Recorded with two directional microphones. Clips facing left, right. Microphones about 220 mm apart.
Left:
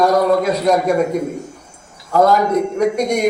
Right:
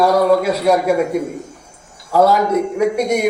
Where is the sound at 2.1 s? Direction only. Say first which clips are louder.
Even; 5° right (ahead or behind).